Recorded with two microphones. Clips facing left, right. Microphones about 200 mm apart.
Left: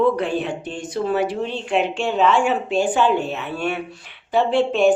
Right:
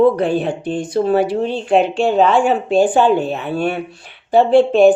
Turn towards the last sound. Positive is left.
turn(degrees=-35)  # may be behind; listen again after turning